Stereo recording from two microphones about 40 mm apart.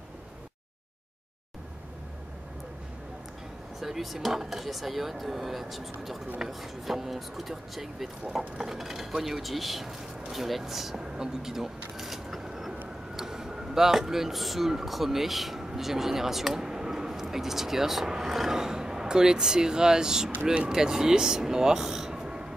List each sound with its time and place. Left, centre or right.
3.8 s speech: centre
11.1 s a sound: centre
13.1 s speech: centre